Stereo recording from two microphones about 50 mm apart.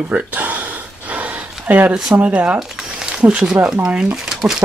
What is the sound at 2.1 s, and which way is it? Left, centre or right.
Speech, right.